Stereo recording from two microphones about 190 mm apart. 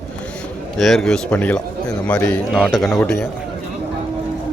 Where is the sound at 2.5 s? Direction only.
Centre (ahead or behind).